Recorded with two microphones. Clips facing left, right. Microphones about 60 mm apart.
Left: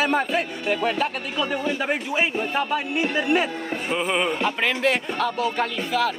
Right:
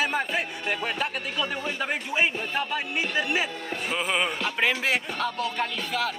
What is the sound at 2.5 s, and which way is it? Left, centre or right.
Speech, centre.